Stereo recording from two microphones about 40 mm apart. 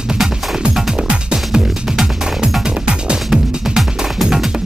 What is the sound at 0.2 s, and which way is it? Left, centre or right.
Music, centre.